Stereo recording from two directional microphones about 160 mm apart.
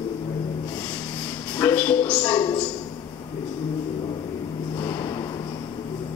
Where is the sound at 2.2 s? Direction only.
25° left (ahead or behind).